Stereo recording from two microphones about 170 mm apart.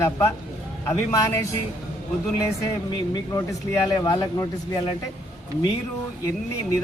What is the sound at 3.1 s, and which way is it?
A man's voice, 20° left (ahead or behind).